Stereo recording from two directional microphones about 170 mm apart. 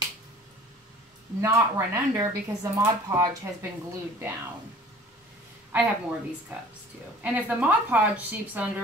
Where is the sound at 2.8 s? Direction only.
20° right (ahead or behind).